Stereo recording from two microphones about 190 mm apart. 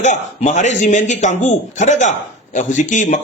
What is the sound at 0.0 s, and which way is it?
A man's voice, 35° left (ahead or behind).